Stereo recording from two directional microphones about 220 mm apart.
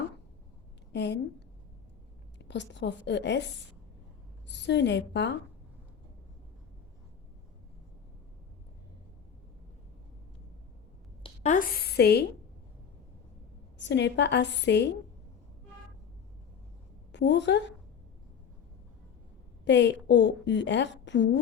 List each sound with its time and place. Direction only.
0.9 s a woman's voice: 50° left (ahead or behind)
2.4 s a woman's voice: 50° left (ahead or behind)
11.2 s a sound: 35° left (ahead or behind)
13.7 s a woman's voice: 55° left (ahead or behind)
17.1 s a woman's voice: 55° left (ahead or behind)
19.6 s a woman's voice: 55° left (ahead or behind)